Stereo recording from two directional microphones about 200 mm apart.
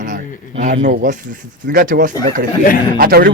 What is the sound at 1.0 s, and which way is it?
A man's voice, 40° right (ahead or behind).